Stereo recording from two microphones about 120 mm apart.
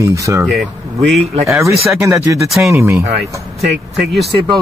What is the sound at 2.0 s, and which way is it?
Speech, 25° right (ahead or behind).